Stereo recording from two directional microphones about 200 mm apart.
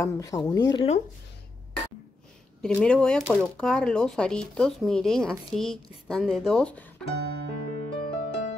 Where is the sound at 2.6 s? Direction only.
5° left (ahead or behind).